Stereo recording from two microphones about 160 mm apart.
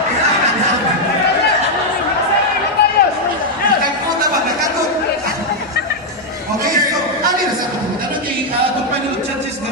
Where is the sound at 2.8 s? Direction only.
90° left.